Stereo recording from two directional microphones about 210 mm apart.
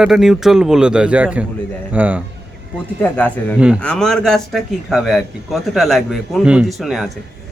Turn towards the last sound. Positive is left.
turn(degrees=0)  # may be behind; listen again after turning